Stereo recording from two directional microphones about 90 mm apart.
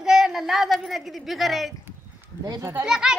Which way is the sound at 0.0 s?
5° right (ahead or behind).